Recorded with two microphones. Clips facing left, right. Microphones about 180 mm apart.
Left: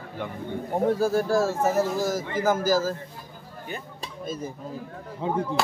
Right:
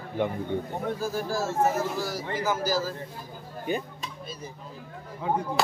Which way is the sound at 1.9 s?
45° left (ahead or behind).